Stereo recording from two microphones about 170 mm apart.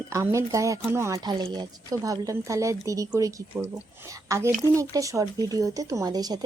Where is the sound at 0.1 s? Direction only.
15° right (ahead or behind).